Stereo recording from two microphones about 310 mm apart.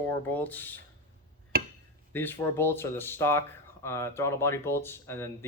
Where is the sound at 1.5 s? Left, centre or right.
Right.